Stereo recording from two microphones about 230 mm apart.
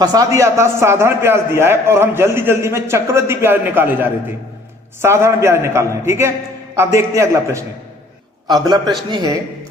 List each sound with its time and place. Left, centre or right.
0.0 s a man's voice: centre